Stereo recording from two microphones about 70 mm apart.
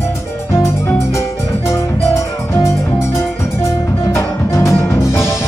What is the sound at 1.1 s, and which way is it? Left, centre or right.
Music, left.